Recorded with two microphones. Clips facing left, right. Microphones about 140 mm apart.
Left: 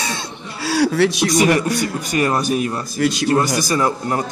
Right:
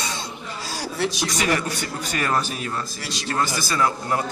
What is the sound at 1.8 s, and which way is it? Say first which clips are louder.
A man's voice: left 8 dB; 15° left (ahead or behind).